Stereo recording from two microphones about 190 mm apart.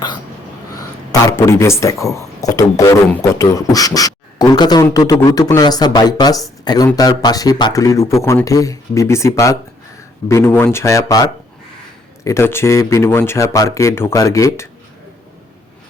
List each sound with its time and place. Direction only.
1.3 s speech: 15° left (ahead or behind)